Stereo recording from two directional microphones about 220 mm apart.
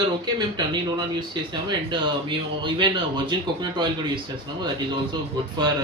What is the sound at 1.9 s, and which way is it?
Speech, 20° right (ahead or behind).